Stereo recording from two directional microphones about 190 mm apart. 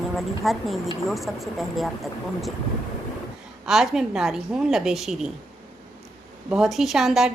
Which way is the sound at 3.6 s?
Centre (ahead or behind).